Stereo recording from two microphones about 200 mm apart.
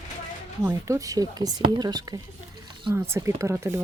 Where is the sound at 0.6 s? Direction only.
15° right (ahead or behind).